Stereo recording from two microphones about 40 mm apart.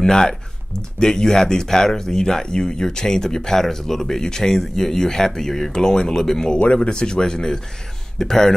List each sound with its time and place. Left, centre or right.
0.0 s speech: centre